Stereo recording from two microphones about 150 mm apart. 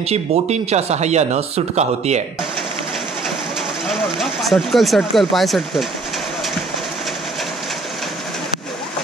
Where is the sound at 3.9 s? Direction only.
Centre (ahead or behind).